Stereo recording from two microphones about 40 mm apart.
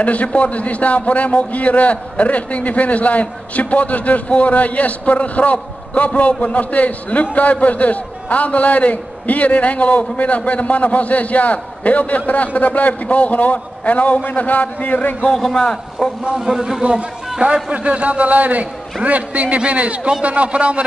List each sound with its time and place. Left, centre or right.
0.0 s a man's voice: left
15.3 s a man's voice: centre
16.3 s a man's voice: centre
16.8 s a man's voice: right